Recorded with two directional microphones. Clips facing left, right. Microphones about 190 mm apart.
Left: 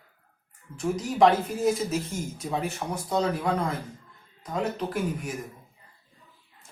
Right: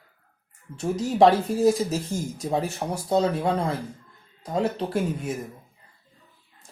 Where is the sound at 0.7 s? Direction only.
35° right (ahead or behind).